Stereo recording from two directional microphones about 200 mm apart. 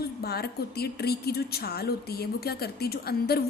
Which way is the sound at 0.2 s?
50° left (ahead or behind).